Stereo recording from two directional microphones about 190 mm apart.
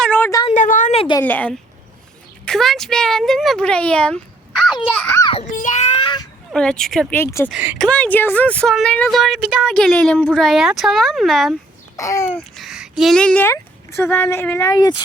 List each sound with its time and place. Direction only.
0.0 s a sound: 10° left (ahead or behind)
0.5 s a sound: 40° left (ahead or behind)
1.2 s babbling: 10° left (ahead or behind)
2.4 s a woman's voice: 5° left (ahead or behind)
4.7 s a child's voice: 25° left (ahead or behind)
4.9 s babbling: 10° left (ahead or behind)
5.2 s a child's voice: 30° left (ahead or behind)
5.5 s a sound: 40° left (ahead or behind); by 6.2 s 25° left (ahead or behind)
6.5 s speech: 5° left (ahead or behind)
7.2 s babbling: 15° left (ahead or behind)
7.5 s speech: 5° right (ahead or behind)
7.9 s speech: 10° left (ahead or behind)
11.9 s babbling: 15° left (ahead or behind)
12.5 s speech: centre (ahead or behind); by 15.0 s 20° left (ahead or behind)